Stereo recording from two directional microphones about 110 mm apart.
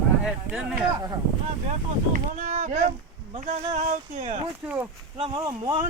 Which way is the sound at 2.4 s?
90° right.